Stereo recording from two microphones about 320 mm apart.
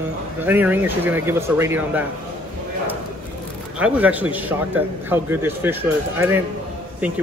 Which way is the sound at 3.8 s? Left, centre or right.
Centre.